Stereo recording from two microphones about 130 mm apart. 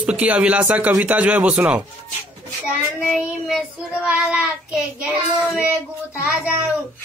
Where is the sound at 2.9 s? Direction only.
Centre (ahead or behind).